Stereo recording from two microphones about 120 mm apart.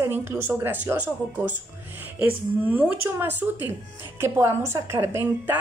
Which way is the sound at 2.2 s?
15° right (ahead or behind).